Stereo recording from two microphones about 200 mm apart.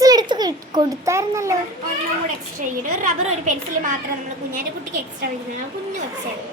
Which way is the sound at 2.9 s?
40° right (ahead or behind).